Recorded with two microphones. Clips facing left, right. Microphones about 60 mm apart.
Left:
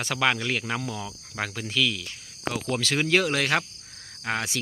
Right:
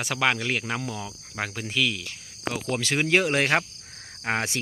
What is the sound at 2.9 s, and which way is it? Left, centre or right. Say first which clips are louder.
Speech: right 1 dB; right.